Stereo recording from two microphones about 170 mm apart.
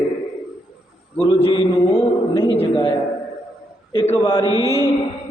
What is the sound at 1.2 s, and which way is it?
A man's voice, 25° left (ahead or behind).